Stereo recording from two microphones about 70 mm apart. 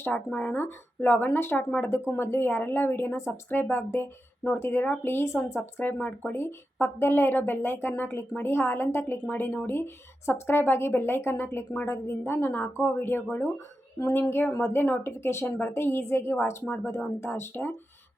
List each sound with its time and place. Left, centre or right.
0.0 s speech: left